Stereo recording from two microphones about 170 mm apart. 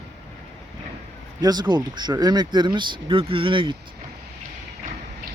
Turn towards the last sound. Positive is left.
turn(degrees=-30)  # may be behind; listen again after turning